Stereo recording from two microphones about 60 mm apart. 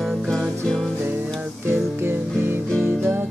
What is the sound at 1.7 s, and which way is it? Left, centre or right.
Music, right.